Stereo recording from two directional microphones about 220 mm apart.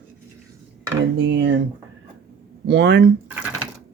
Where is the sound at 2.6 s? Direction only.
50° right (ahead or behind).